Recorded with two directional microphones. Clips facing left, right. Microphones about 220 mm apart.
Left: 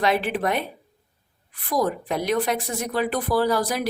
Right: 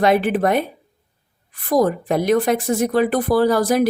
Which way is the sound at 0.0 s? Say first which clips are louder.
Right 6 dB; 50° right (ahead or behind).